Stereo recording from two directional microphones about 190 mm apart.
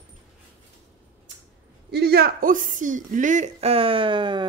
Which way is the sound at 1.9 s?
60° right (ahead or behind).